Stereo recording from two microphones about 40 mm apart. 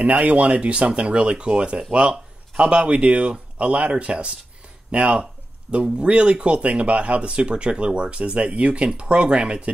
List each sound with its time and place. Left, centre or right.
0.0 s speech: right